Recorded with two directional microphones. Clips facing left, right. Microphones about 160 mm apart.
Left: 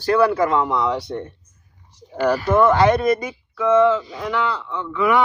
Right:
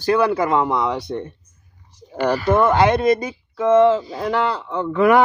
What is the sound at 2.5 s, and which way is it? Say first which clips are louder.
Speech: even; 20° right (ahead or behind).